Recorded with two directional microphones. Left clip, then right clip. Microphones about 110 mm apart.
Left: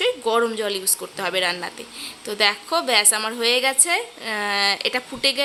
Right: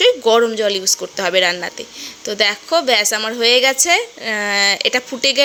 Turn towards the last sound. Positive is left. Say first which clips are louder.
# right 5 dB
turn(degrees=-40)  # may be behind; listen again after turning